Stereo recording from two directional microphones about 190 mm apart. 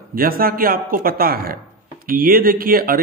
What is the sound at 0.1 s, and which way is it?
Speech, 50° right (ahead or behind).